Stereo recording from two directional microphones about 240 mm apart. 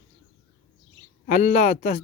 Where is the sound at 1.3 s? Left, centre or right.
Left.